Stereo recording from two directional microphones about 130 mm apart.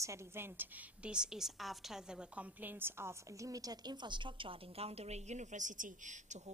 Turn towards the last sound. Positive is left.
turn(degrees=-70)  # may be behind; listen again after turning